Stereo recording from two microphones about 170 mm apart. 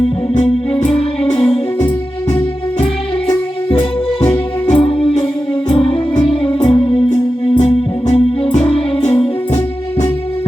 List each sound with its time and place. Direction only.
0.0 s music: 35° left (ahead or behind)
3.7 s music: 30° left (ahead or behind)